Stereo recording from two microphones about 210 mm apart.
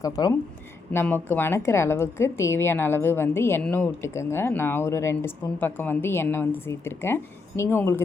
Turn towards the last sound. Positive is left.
turn(degrees=10)  # may be behind; listen again after turning